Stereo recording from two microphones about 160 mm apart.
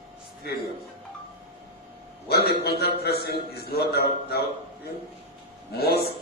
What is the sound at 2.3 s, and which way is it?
Speech, 90° left.